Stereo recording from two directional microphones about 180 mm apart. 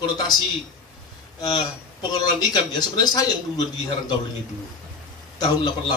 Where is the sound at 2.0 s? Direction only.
25° left (ahead or behind).